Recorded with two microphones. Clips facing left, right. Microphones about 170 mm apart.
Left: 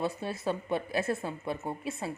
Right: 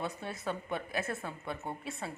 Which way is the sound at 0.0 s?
25° left (ahead or behind).